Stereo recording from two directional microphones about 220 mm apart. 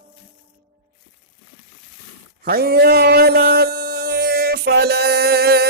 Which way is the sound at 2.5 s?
45° right (ahead or behind).